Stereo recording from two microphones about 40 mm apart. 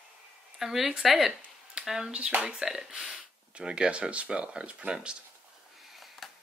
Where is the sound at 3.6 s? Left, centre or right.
Right.